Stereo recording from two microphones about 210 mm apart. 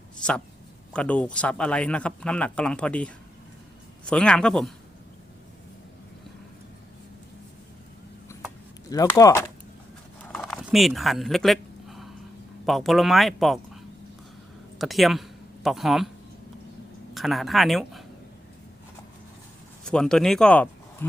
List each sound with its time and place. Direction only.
0.2 s speech: 5° left (ahead or behind)
8.3 s a sound: 15° left (ahead or behind)
8.9 s speech: 15° left (ahead or behind)
10.4 s a sound: centre (ahead or behind)
12.6 s speech: centre (ahead or behind)
14.8 s speech: centre (ahead or behind)
17.2 s speech: centre (ahead or behind)
19.8 s speech: 5° left (ahead or behind)